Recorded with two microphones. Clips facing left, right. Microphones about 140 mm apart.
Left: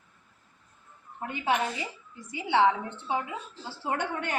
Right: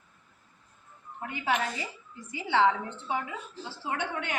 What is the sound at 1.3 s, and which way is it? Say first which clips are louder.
A woman's voice: left 2 dB; 25° left (ahead or behind).